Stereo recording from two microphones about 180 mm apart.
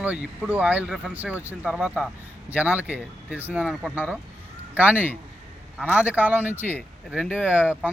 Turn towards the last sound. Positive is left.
turn(degrees=-10)  # may be behind; listen again after turning